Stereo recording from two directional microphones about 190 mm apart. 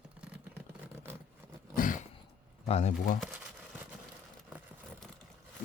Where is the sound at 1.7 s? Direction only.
45° left (ahead or behind).